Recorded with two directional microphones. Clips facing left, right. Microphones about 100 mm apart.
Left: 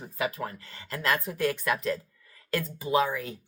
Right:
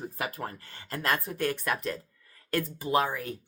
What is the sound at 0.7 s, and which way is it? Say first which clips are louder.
A woman's voice: left 1 dB; 35° right (ahead or behind).